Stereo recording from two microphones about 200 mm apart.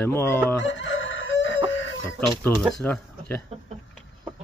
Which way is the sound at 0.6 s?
70° left (ahead or behind).